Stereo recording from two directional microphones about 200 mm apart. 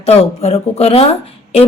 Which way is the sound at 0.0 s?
30° left (ahead or behind).